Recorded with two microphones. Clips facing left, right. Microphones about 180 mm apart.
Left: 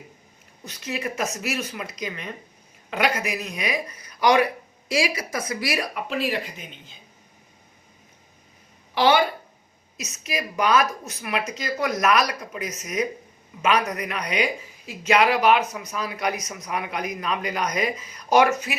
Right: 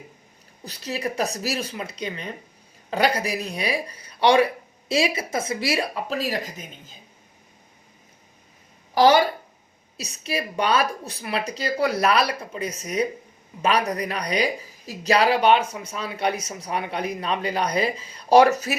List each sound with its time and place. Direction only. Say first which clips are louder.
0.6 s a man's voice: right 1 dB; 35° right (ahead or behind)
9.0 s a man's voice: right 3 dB; 40° right (ahead or behind)